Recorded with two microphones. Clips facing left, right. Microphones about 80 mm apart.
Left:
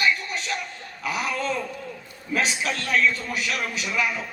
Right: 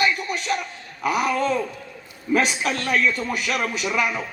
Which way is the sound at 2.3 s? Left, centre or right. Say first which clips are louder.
Right 4 dB; right.